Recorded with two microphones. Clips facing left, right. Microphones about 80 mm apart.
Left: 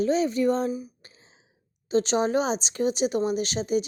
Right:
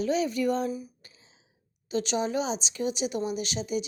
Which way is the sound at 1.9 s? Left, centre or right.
Left.